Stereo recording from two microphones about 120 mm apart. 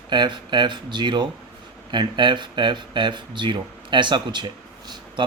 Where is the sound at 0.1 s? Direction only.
40° right (ahead or behind).